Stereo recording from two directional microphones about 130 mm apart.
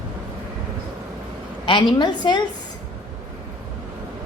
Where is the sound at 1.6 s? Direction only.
35° left (ahead or behind).